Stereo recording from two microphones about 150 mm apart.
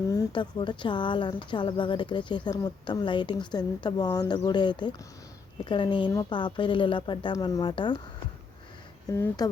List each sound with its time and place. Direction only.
0.1 s speech: 30° left (ahead or behind)
9.1 s speech: 20° left (ahead or behind)